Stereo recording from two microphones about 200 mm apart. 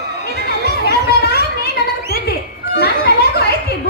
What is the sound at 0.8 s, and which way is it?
Children playing, 55° left (ahead or behind).